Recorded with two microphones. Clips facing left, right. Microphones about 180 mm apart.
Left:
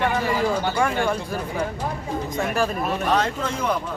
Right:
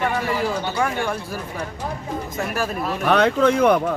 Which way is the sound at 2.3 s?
5° right (ahead or behind).